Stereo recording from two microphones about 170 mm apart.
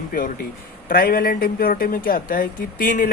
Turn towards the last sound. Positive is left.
turn(degrees=55)  # may be behind; listen again after turning